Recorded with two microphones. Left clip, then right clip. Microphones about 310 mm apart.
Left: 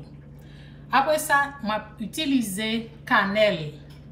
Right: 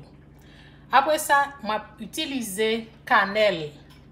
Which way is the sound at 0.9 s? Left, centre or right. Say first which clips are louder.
Right 1 dB; right.